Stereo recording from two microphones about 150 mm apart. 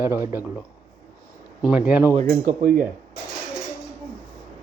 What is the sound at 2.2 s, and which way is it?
Speech, 70° right (ahead or behind).